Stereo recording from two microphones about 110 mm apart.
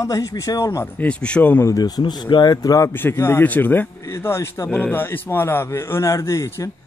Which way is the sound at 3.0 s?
20° left (ahead or behind).